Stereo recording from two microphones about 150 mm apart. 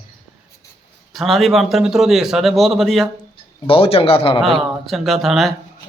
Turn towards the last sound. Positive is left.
turn(degrees=0)  # may be behind; listen again after turning